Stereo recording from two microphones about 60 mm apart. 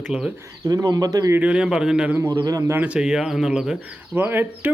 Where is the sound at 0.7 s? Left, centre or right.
Right.